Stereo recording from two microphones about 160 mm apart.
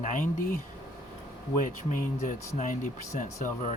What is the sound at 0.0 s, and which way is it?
Speech, 55° left (ahead or behind).